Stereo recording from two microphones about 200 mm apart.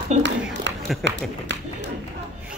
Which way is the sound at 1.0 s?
65° right (ahead or behind).